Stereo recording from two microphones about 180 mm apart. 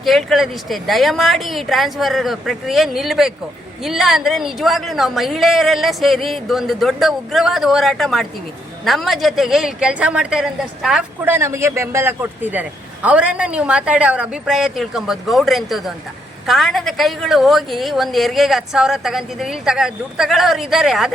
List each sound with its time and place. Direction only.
0.0 s a woman's voice: centre (ahead or behind)
11.3 s a man's voice: 15° right (ahead or behind)